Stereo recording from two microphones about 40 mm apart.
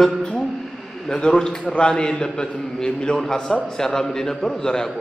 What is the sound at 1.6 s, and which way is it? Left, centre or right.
Speech, left.